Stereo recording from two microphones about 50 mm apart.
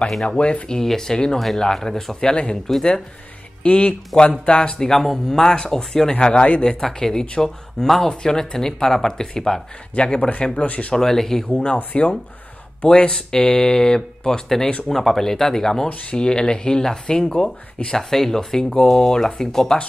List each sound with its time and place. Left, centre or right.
0.1 s speech: centre
0.4 s speech: left
0.7 s speech: centre
2.1 s speech: centre
3.6 s speech: left
11.0 s speech: centre
11.4 s speech: centre